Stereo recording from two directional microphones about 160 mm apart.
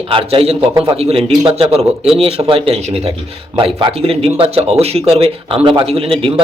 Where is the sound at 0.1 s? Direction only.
35° right (ahead or behind).